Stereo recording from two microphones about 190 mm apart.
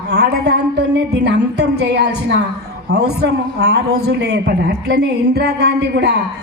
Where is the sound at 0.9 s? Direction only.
65° right (ahead or behind).